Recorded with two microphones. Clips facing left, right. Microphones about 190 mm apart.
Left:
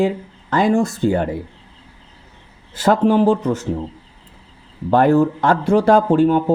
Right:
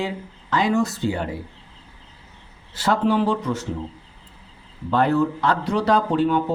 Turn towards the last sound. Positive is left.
turn(degrees=45)  # may be behind; listen again after turning